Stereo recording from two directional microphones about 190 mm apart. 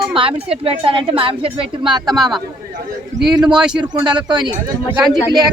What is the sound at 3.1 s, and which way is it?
Speech, centre (ahead or behind).